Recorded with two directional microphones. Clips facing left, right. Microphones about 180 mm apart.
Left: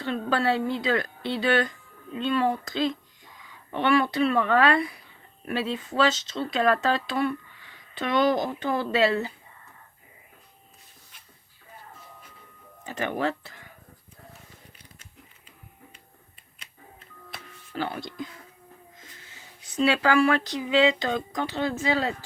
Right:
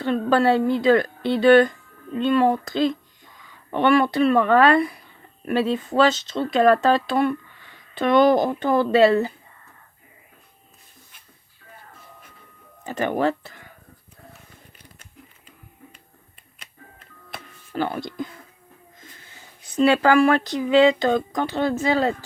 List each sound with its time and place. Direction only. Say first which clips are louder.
0.0 s speech: right 7 dB; 50° right (ahead or behind)
12.8 s speech: right 6 dB; 45° right (ahead or behind)
17.3 s a sound: right 6 dB; 45° right (ahead or behind)
19.7 s speech: right 5 dB; 50° right (ahead or behind)